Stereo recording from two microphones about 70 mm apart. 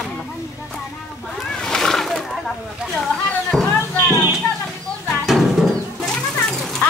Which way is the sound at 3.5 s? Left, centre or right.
Centre.